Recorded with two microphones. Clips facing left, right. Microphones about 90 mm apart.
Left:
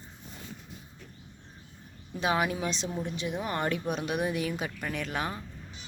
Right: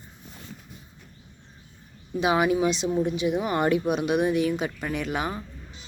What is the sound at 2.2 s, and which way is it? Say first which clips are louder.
Speech: right 6 dB; 5° right (ahead or behind).